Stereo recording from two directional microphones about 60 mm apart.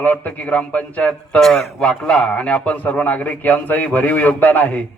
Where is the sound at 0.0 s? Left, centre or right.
Left.